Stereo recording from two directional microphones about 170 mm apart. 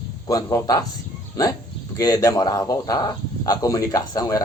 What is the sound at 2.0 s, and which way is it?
Speech, 20° left (ahead or behind).